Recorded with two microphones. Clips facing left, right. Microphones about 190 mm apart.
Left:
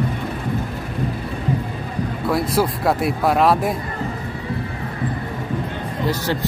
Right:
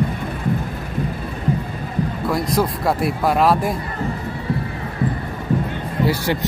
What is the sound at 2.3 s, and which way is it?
Speech, 5° left (ahead or behind).